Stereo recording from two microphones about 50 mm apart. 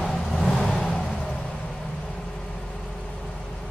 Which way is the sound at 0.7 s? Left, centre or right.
Centre.